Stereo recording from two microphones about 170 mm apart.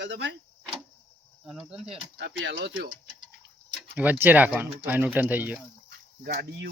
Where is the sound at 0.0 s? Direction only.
90° right.